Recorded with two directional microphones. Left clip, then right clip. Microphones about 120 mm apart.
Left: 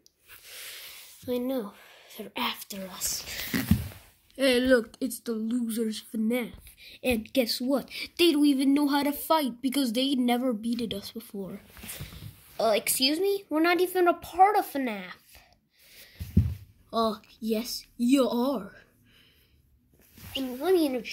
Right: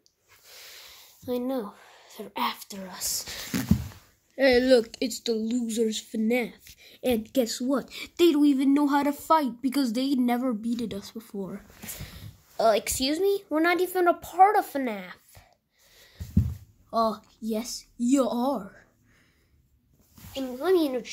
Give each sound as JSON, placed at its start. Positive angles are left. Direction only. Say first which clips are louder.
{"t": 1.2, "sound": "speech", "louder": "right 1 dB", "side_deg": 0}
{"t": 2.9, "sound": "speech", "louder": "right 2 dB", "side_deg": -30}
{"t": 4.9, "sound": "speech", "louder": "right 5 dB", "side_deg": 25}
{"t": 6.1, "sound": "a woman's voice", "louder": "right 1 dB", "side_deg": -10}
{"t": 16.9, "sound": "speech", "louder": "right 2 dB", "side_deg": 0}
{"t": 20.4, "sound": "speech", "louder": "right 1 dB", "side_deg": 0}